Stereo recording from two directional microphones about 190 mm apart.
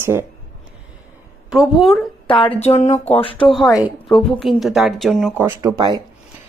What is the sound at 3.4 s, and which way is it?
Speech, centre (ahead or behind).